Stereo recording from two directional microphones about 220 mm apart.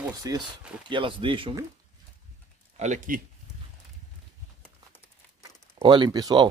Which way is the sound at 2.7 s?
30° right (ahead or behind).